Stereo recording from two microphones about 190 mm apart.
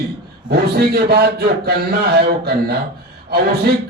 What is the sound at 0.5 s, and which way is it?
A man's voice, 55° right (ahead or behind).